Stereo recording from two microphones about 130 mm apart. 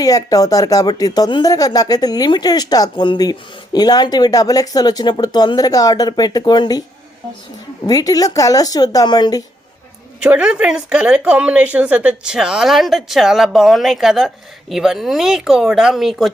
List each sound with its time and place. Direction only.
0.0 s speech: 25° left (ahead or behind)
7.9 s speech: 30° left (ahead or behind)
10.2 s speech: 10° right (ahead or behind)